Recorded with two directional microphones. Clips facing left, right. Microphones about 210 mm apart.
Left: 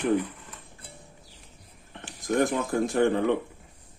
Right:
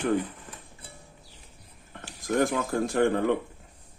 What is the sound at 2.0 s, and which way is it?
Speech, 15° left (ahead or behind).